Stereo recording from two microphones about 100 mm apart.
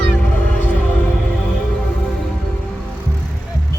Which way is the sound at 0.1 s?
15° left (ahead or behind).